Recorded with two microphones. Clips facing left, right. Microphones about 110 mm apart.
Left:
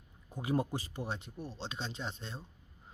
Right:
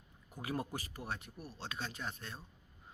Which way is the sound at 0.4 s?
25° left (ahead or behind).